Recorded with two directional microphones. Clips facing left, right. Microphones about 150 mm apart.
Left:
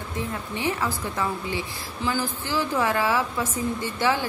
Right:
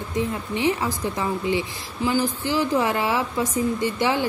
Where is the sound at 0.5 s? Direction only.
15° right (ahead or behind).